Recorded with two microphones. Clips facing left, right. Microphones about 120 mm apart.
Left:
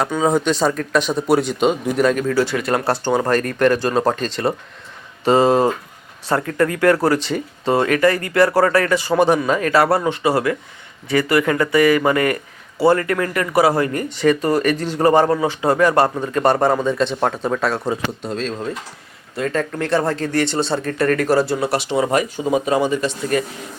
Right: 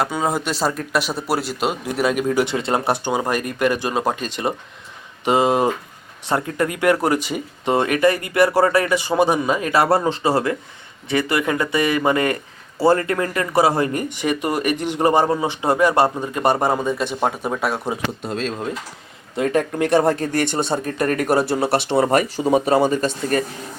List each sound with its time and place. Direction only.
0.0 s speech: 5° right (ahead or behind)
2.2 s speech: 20° right (ahead or behind)
20.3 s speech: 55° right (ahead or behind)
20.7 s speech: 15° right (ahead or behind)
21.7 s speech: 60° right (ahead or behind)
22.4 s speech: 35° right (ahead or behind)